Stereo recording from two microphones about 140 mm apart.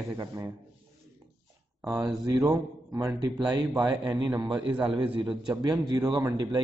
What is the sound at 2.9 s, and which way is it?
A man's voice, 20° right (ahead or behind).